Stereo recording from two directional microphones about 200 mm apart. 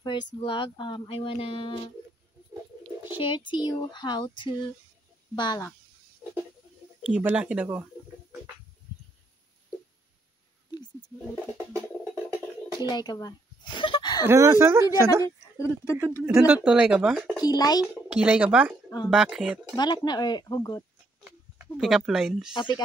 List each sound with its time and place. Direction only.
0.3 s speech: 25° left (ahead or behind)
3.2 s speech: 25° left (ahead or behind)
7.1 s speech: 5° right (ahead or behind)
11.5 s music: 15° right (ahead or behind)
12.7 s a sound: 20° left (ahead or behind)
14.2 s speech: 15° right (ahead or behind)
15.2 s speech: 15° left (ahead or behind)
16.3 s speech: 5° right (ahead or behind)
17.4 s speech: 20° left (ahead or behind)
18.0 s speech: 5° right (ahead or behind)
19.7 s speech: 20° left (ahead or behind)
21.7 s speech: 5° right (ahead or behind)